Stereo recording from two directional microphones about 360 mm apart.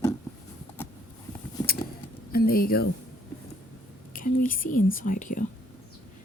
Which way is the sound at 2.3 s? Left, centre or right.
Left.